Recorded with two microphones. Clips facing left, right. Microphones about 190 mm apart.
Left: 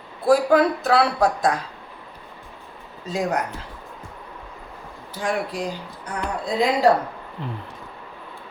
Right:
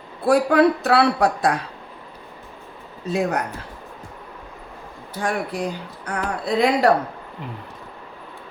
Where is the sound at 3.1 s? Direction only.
60° right (ahead or behind).